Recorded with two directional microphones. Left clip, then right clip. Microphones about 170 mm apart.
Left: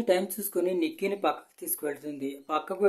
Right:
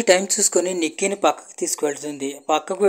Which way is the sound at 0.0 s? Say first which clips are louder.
Right 10 dB; 30° right (ahead or behind).